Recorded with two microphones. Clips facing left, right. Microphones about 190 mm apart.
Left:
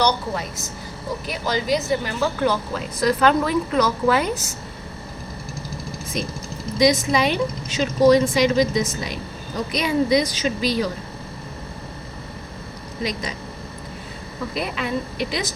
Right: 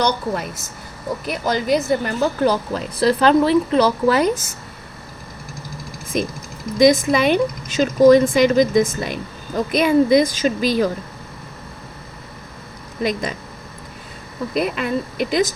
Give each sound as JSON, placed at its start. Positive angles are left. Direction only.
{"t": 1.3, "sound": "a woman's voice", "side_deg": -55}
{"t": 6.1, "sound": "speech", "side_deg": -50}
{"t": 13.0, "sound": "speech", "side_deg": -50}
{"t": 14.5, "sound": "speech", "side_deg": -50}